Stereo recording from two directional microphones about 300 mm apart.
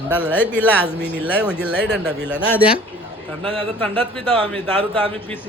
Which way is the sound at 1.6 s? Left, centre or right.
Centre.